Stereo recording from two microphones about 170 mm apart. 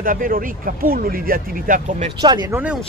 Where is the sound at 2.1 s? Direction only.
25° right (ahead or behind).